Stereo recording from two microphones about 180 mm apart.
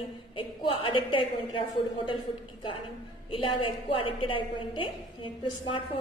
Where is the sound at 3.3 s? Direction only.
30° left (ahead or behind).